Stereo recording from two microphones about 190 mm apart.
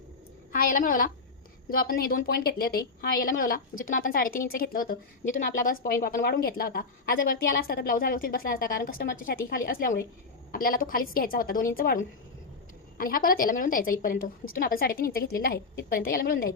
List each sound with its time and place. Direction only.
0.5 s a woman's voice: 45° left (ahead or behind)